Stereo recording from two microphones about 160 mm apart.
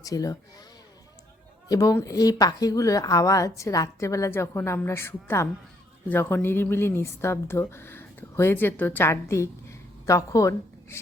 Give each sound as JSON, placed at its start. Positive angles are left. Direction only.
{"t": 0.0, "sound": "a woman's voice", "side_deg": 20}
{"t": 1.6, "sound": "a woman's voice", "side_deg": 20}